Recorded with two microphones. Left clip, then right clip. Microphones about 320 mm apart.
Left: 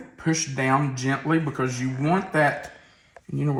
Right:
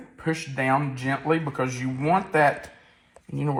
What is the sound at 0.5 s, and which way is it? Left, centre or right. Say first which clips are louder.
Speech: right 1 dB; centre.